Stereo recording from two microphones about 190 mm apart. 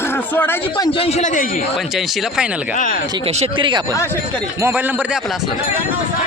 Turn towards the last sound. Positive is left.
turn(degrees=0)  # may be behind; listen again after turning